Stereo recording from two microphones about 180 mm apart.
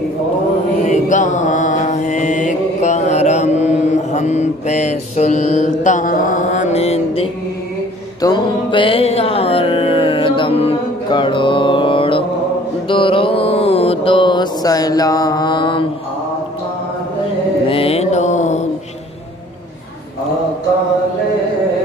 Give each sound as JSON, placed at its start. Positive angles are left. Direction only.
{"t": 0.8, "sound": "mantra", "side_deg": 40}
{"t": 8.2, "sound": "music", "side_deg": 25}
{"t": 12.8, "sound": "mantra", "side_deg": 30}
{"t": 17.6, "sound": "mantra", "side_deg": 30}